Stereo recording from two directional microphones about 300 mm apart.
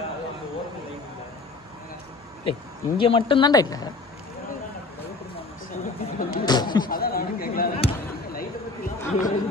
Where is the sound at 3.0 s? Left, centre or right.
Centre.